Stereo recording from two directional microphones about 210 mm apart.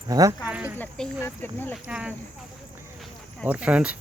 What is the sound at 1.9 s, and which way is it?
Speech, 5° right (ahead or behind).